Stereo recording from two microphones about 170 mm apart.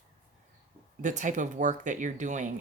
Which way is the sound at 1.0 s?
45° right (ahead or behind).